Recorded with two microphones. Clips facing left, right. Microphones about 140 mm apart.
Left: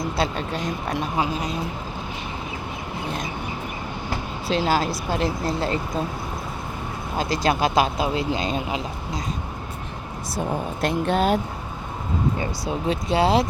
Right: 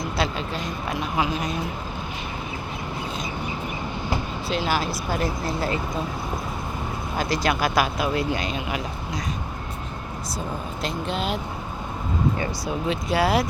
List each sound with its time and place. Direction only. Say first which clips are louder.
4.4 s speech: left 4 dB; 35° left (ahead or behind)
7.2 s speech: left 2 dB; 30° left (ahead or behind)
10.8 s speech: left 7 dB; 55° left (ahead or behind)
12.4 s speech: even; 25° left (ahead or behind)